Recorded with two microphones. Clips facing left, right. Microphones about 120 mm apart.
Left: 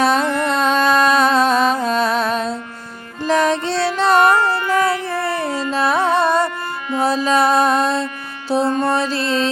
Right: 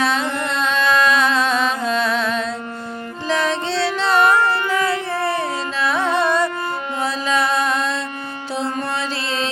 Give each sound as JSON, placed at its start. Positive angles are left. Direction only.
{"t": 0.0, "sound": "music", "side_deg": 45}